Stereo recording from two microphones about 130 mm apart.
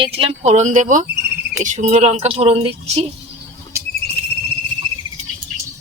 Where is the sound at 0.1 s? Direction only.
55° right (ahead or behind).